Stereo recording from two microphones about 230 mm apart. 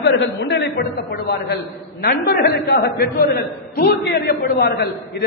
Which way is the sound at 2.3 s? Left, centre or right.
Left.